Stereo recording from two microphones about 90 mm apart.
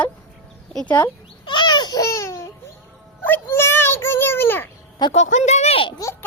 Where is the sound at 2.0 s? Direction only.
35° left (ahead or behind).